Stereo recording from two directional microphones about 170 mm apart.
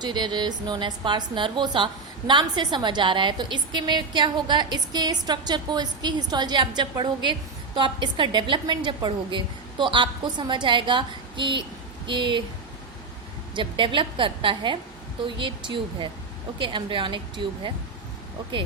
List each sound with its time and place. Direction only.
0.0 s a woman's voice: 25° right (ahead or behind)
13.6 s a woman's voice: 30° right (ahead or behind)